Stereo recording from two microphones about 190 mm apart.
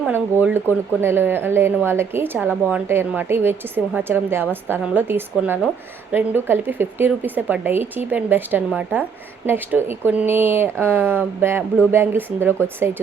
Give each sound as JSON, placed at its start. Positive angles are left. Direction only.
{"t": 0.0, "sound": "speech", "side_deg": -10}